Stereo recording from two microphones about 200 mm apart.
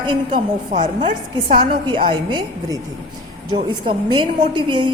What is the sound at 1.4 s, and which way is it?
A woman's voice, 25° right (ahead or behind).